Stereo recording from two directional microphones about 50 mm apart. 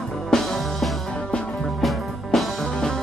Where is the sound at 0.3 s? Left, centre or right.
Centre.